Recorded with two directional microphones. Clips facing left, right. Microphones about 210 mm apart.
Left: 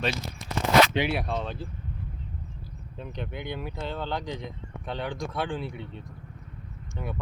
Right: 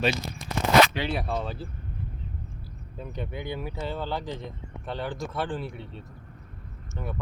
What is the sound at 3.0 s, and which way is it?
Speech, 5° right (ahead or behind).